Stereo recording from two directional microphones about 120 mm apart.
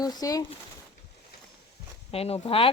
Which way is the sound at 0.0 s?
30° left (ahead or behind).